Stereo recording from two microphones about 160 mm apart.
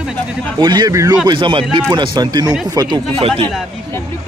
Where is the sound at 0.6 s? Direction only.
25° right (ahead or behind).